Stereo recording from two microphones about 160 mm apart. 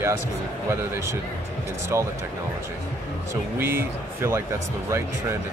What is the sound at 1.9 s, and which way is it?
Speech, 15° right (ahead or behind).